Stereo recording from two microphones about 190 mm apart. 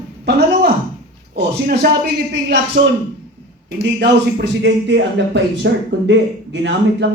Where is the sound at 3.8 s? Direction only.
70° right (ahead or behind).